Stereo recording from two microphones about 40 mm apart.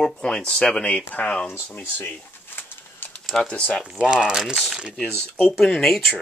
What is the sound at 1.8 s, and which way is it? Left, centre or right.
Pigeon, left.